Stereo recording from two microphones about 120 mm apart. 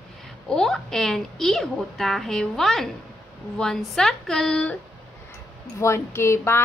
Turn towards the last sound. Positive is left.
turn(degrees=20)  # may be behind; listen again after turning